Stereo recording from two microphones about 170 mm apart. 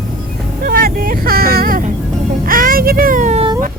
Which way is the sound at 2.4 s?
55° right (ahead or behind).